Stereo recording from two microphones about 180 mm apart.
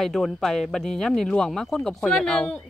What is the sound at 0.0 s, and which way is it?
A woman's voice, centre (ahead or behind).